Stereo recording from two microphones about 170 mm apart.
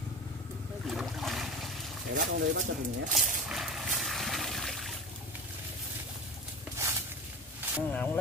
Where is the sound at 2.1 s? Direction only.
50° right (ahead or behind).